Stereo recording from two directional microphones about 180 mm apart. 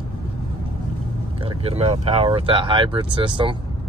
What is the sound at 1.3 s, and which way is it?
Speech, 30° right (ahead or behind).